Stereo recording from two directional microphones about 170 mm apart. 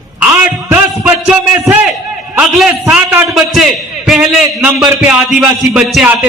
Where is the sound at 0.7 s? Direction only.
10° right (ahead or behind).